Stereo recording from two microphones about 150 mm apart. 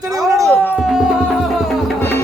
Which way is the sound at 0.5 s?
15° left (ahead or behind).